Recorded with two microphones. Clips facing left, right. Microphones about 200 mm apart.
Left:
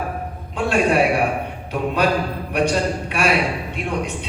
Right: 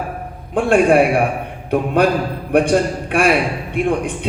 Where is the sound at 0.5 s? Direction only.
55° right (ahead or behind).